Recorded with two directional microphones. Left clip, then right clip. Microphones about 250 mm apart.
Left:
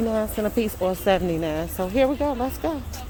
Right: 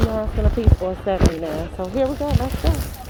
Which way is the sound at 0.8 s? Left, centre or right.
Centre.